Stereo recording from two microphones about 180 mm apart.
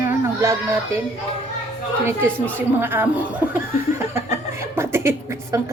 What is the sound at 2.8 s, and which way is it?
Speech, 10° right (ahead or behind).